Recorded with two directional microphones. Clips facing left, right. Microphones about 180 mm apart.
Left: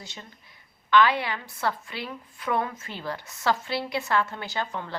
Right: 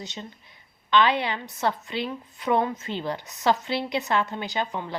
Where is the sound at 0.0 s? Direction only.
20° right (ahead or behind).